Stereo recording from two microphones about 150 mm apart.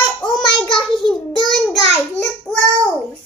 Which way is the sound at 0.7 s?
5° left (ahead or behind).